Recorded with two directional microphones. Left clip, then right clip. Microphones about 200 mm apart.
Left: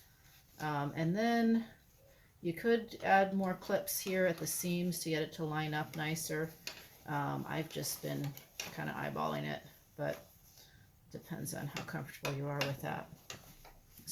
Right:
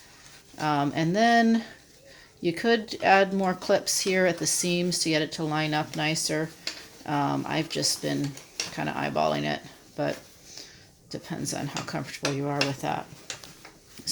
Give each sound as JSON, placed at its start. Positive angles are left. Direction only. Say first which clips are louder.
{"t": 0.6, "sound": "speech", "louder": "right 12 dB", "side_deg": -45}
{"t": 11.3, "sound": "speech", "louder": "right 12 dB", "side_deg": -40}